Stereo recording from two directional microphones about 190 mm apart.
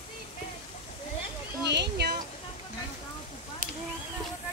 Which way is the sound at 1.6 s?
65° right (ahead or behind).